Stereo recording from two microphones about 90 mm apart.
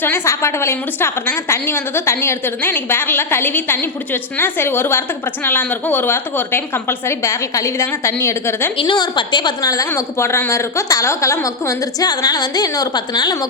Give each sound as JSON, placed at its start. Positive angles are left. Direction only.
{"t": 0.0, "sound": "a woman's voice", "side_deg": 30}
{"t": 8.8, "sound": "a woman's voice", "side_deg": 60}
{"t": 9.9, "sound": "a woman's voice", "side_deg": 30}